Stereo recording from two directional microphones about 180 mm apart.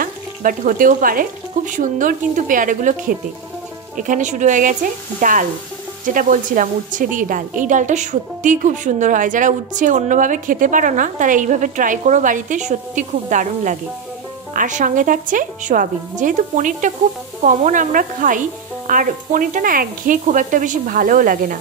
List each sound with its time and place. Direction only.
0.0 s a woman's voice: 50° right (ahead or behind)